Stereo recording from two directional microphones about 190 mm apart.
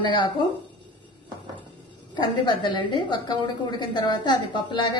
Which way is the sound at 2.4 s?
25° left (ahead or behind).